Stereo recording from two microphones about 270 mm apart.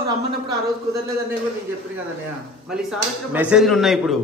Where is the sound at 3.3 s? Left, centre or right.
Centre.